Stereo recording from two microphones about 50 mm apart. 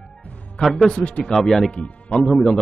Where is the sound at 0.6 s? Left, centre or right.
Centre.